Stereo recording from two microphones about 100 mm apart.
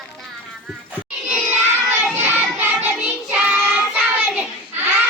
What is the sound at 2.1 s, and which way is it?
Child singing, 20° right (ahead or behind).